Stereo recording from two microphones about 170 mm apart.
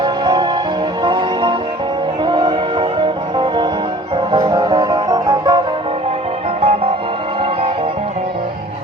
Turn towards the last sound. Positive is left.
turn(degrees=-35)  # may be behind; listen again after turning